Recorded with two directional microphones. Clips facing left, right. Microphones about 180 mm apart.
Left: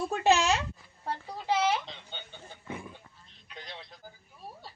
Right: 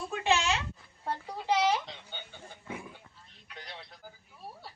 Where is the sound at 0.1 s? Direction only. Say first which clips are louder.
Left 3 dB; 40° left (ahead or behind).